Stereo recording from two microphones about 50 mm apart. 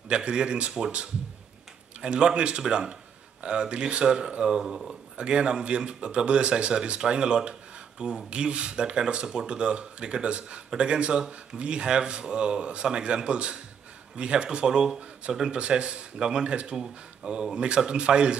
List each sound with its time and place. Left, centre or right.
0.1 s speech: centre
15.6 s speech: right